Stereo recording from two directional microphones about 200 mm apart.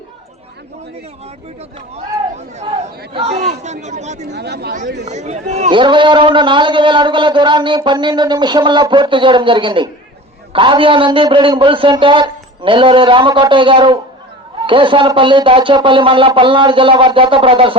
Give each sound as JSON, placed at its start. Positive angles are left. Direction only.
{"t": 3.1, "sound": "speech", "side_deg": -30}
{"t": 4.3, "sound": "speech", "side_deg": -55}
{"t": 5.0, "sound": "a man's voice", "side_deg": -35}